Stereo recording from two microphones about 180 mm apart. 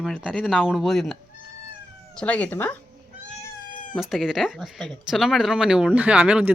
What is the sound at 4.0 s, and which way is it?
Speech, centre (ahead or behind).